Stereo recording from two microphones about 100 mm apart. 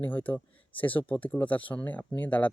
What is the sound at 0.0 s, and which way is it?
Speech, 15° left (ahead or behind).